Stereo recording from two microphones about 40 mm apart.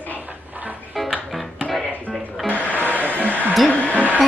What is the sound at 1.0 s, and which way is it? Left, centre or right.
Music, centre.